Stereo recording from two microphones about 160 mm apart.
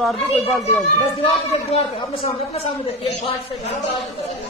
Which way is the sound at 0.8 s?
40° left (ahead or behind).